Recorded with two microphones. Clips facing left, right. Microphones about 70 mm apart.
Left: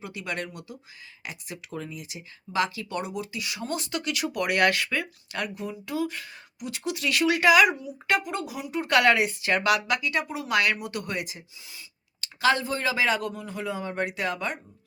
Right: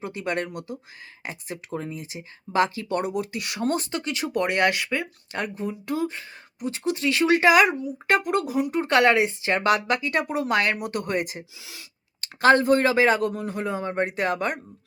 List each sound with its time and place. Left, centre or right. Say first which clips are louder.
0.0 s speech: right 5 dB; right
5.4 s speech: right 3 dB; right
8.8 s speech: right 1 dB; right
10.5 s speech: even; right
10.8 s a man's voice: right 5 dB; right
11.6 s speech: right 3 dB; right
12.2 s a man's voice: right 6 dB; right